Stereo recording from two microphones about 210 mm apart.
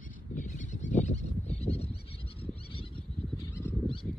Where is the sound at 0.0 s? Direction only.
40° left (ahead or behind).